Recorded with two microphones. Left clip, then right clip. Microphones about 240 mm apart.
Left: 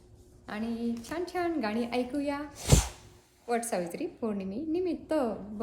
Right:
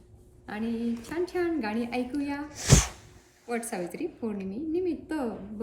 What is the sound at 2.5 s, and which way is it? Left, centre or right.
Speech, right.